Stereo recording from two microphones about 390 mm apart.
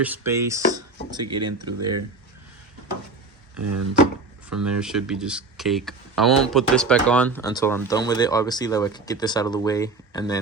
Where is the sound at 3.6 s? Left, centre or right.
Right.